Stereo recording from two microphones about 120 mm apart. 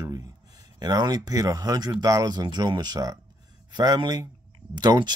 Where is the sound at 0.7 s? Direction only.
35° right (ahead or behind).